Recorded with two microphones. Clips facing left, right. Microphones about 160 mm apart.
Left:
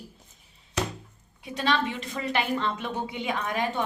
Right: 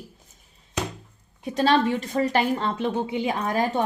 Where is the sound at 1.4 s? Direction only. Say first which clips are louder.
Right 6 dB; 40° right (ahead or behind).